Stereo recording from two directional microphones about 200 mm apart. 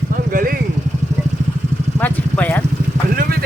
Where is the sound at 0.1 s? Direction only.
45° right (ahead or behind).